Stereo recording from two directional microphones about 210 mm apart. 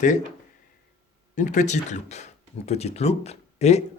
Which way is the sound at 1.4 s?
35° left (ahead or behind).